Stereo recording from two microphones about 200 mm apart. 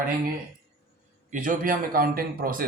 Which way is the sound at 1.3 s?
40° right (ahead or behind).